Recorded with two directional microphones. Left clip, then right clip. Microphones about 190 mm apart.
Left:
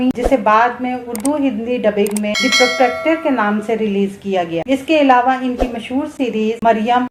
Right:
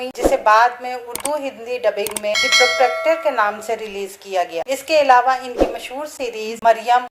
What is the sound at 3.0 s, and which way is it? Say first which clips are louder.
Speech: left 1 dB; 40° right (ahead or behind).